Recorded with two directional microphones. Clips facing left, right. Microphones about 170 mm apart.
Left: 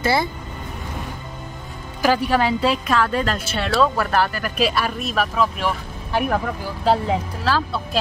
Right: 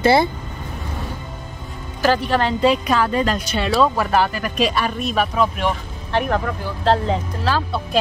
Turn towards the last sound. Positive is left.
turn(degrees=0)  # may be behind; listen again after turning